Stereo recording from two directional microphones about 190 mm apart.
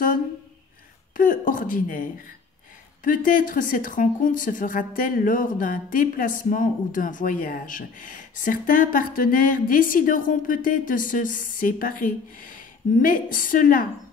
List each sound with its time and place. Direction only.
1.1 s speech: 45° left (ahead or behind)